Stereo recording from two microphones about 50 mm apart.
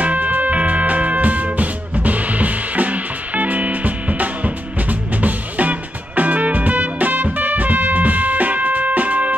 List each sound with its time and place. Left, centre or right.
0.0 s music: right